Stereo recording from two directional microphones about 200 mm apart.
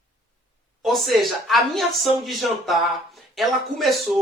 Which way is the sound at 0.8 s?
Centre (ahead or behind).